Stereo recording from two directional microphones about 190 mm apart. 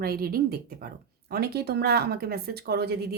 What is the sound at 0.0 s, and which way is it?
Speech, 50° right (ahead or behind).